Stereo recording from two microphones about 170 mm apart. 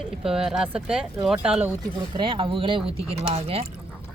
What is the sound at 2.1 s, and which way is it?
Speech, 30° right (ahead or behind).